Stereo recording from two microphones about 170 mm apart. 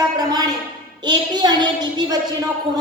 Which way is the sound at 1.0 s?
25° right (ahead or behind).